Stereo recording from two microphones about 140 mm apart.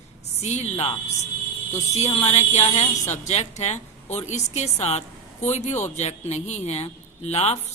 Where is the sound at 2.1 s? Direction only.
45° left (ahead or behind).